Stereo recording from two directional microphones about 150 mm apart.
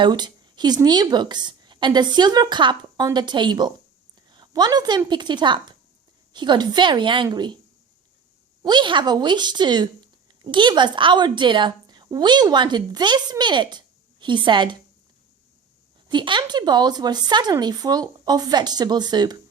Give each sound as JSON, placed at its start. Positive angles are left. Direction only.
{"t": 0.0, "sound": "a woman's voice", "side_deg": -30}
{"t": 8.6, "sound": "a woman's voice", "side_deg": -30}
{"t": 16.0, "sound": "a woman's voice", "side_deg": -30}